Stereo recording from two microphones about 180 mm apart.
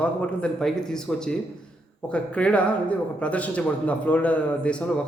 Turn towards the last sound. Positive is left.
turn(degrees=5)  # may be behind; listen again after turning